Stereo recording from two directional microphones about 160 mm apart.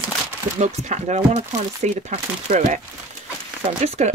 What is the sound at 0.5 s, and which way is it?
Speech, 45° right (ahead or behind).